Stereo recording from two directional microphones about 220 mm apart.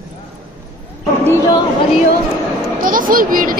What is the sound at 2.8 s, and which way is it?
Speech, 40° right (ahead or behind).